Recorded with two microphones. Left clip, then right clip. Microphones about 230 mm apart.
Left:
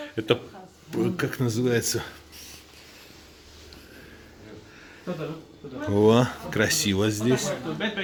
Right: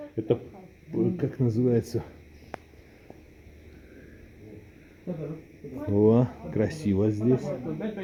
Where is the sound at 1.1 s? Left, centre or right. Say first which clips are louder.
Left 3 dB; centre.